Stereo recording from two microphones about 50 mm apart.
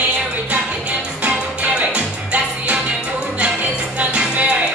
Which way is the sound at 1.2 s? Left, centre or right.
Right.